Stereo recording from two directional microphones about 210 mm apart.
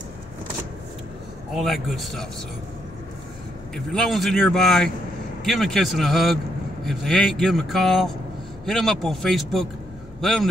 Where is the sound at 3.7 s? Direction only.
Centre (ahead or behind).